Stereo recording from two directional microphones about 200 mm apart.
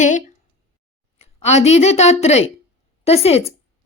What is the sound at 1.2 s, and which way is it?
A woman's voice, 35° left (ahead or behind).